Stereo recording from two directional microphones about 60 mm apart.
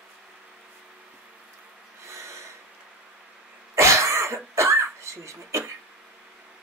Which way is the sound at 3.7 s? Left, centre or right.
Right.